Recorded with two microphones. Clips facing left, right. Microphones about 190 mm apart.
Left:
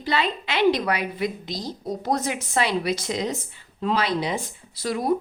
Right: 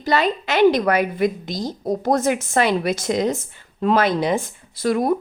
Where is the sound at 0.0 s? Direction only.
45° right (ahead or behind).